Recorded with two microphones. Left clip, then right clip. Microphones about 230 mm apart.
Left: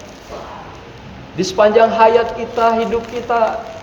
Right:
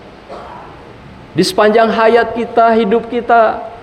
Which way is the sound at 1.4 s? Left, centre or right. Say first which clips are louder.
Right 1 dB; right.